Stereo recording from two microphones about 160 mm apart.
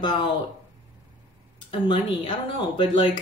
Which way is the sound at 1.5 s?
30° left (ahead or behind).